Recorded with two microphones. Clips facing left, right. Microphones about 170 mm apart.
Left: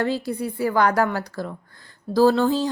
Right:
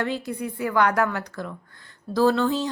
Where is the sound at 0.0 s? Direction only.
35° left (ahead or behind).